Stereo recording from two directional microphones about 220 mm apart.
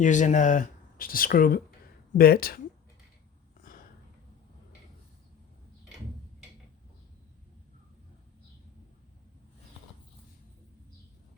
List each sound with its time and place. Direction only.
0.0 s speech: 35° left (ahead or behind)